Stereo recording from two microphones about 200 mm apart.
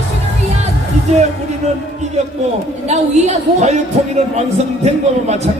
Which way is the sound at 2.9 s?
35° right (ahead or behind).